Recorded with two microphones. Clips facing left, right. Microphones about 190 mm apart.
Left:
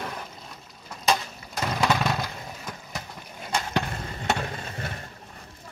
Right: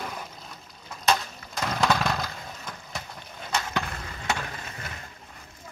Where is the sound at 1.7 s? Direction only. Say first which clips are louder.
Even; 5° left (ahead or behind).